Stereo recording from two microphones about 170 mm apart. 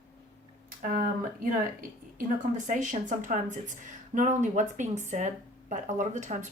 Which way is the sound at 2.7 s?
50° right (ahead or behind).